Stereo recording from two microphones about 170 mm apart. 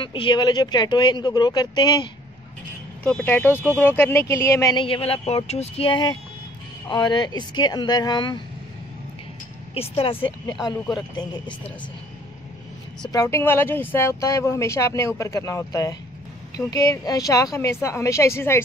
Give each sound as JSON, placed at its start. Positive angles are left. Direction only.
{"t": 0.0, "sound": "speech", "side_deg": 30}
{"t": 3.0, "sound": "speech", "side_deg": 5}
{"t": 4.7, "sound": "speech", "side_deg": 30}
{"t": 9.8, "sound": "speech", "side_deg": 35}
{"t": 13.1, "sound": "speech", "side_deg": 15}